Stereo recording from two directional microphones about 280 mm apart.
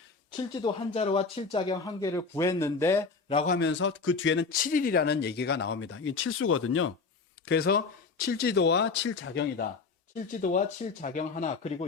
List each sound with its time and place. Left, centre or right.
0.3 s speech: centre
3.3 s a man's voice: left
3.7 s speech: left
7.4 s speech: left
10.2 s a man's voice: left